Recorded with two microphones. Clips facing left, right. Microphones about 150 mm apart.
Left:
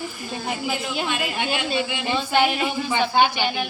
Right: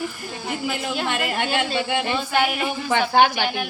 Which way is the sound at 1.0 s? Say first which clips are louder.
Right 3 dB; 60° right (ahead or behind).